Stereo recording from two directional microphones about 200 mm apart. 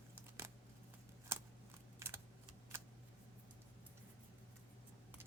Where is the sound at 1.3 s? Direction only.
15° right (ahead or behind).